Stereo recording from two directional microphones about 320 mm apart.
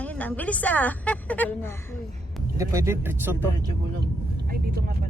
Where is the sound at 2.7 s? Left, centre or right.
Centre.